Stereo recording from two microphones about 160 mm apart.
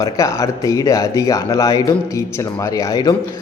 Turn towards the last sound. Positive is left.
turn(degrees=25)  # may be behind; listen again after turning